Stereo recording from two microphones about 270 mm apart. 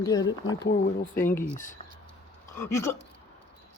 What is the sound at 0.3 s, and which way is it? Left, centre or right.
Speech, left.